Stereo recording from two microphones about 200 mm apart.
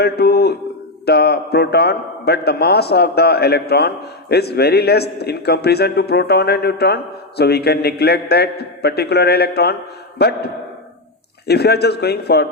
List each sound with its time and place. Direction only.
0.0 s a man's voice: 55° left (ahead or behind)